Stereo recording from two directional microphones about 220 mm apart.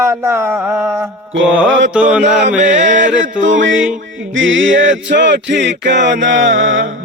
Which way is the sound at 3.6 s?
60° right (ahead or behind).